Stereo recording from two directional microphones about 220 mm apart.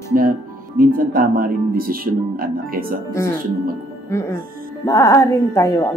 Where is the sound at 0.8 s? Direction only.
40° right (ahead or behind).